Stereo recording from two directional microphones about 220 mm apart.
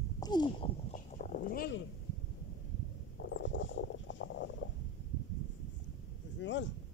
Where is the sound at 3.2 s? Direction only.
60° left (ahead or behind).